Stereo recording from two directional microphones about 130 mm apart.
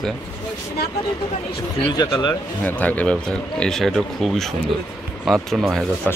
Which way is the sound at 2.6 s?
15° left (ahead or behind).